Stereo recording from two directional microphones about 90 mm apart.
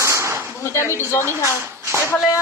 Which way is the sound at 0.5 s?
30° left (ahead or behind).